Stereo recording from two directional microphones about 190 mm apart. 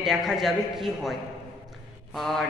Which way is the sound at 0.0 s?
Centre (ahead or behind).